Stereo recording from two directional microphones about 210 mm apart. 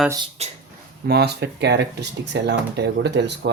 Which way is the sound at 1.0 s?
50° right (ahead or behind).